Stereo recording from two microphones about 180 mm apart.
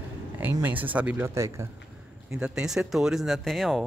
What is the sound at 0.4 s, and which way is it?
Speech, 10° right (ahead or behind).